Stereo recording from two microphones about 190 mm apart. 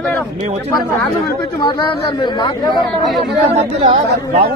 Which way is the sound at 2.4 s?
25° left (ahead or behind).